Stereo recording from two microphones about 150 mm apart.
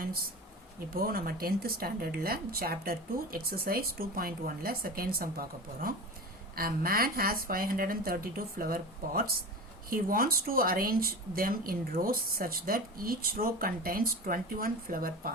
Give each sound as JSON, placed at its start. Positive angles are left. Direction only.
{"t": 0.9, "sound": "speech", "side_deg": -80}